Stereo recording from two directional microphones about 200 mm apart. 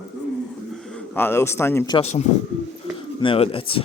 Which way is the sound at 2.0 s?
35° left (ahead or behind).